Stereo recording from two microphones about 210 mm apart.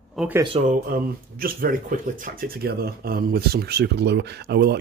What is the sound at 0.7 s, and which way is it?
Speech, 40° right (ahead or behind).